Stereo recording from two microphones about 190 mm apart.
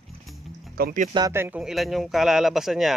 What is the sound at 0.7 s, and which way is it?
Speech, 50° right (ahead or behind).